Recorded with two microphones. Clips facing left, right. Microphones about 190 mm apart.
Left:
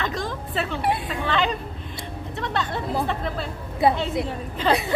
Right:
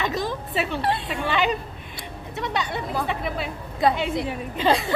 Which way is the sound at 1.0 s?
10° right (ahead or behind).